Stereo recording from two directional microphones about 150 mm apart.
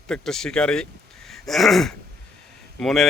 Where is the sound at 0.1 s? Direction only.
5° left (ahead or behind).